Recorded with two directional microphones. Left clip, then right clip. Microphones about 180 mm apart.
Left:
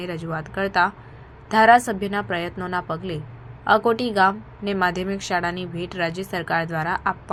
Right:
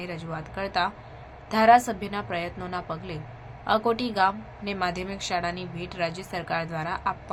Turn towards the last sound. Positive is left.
turn(degrees=20)  # may be behind; listen again after turning